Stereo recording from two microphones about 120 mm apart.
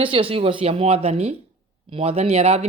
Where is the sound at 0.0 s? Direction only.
50° right (ahead or behind).